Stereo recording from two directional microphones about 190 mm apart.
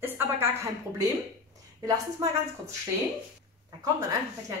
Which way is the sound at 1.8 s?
20° right (ahead or behind).